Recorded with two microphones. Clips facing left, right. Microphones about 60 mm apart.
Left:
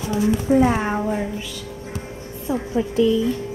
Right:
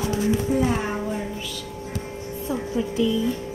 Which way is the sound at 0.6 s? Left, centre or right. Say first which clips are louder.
Left 4 dB; left.